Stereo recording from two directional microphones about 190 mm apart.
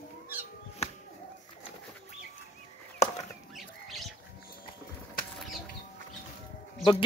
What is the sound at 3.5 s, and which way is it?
Rodents, centre (ahead or behind).